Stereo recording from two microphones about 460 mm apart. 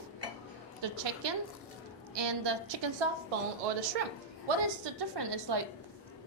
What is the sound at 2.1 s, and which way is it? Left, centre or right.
Speech, right.